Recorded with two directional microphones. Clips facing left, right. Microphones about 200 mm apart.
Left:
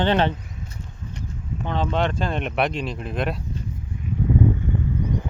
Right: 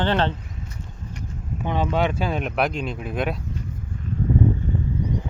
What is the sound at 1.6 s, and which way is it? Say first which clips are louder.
Speech: right 1 dB; 10° right (ahead or behind).